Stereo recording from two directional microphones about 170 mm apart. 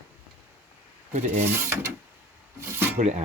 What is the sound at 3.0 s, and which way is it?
Rub, 40° right (ahead or behind).